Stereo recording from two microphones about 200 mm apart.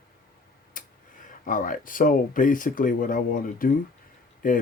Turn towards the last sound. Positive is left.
turn(degrees=40)  # may be behind; listen again after turning